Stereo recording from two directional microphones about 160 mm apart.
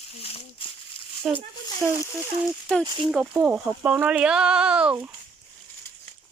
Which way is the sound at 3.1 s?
5° right (ahead or behind).